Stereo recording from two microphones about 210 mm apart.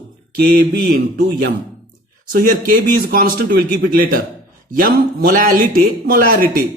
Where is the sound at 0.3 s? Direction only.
45° right (ahead or behind).